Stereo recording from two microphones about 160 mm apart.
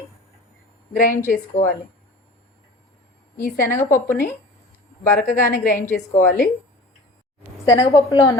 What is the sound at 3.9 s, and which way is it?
Speech, 15° left (ahead or behind).